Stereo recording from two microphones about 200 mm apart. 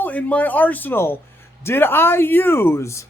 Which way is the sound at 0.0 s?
10° left (ahead or behind).